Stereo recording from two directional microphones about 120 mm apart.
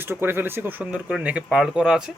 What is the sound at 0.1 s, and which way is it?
Speech, 20° right (ahead or behind).